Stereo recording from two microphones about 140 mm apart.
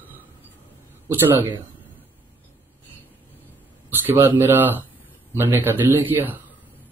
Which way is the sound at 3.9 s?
15° right (ahead or behind).